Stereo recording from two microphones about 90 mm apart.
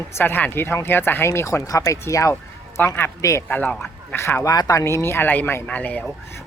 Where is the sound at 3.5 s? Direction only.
20° left (ahead or behind).